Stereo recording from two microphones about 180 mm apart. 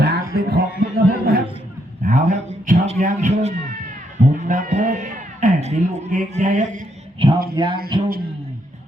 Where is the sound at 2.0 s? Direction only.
50° right (ahead or behind).